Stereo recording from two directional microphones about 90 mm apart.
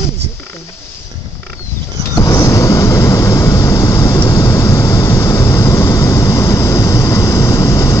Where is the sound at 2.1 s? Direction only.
40° left (ahead or behind).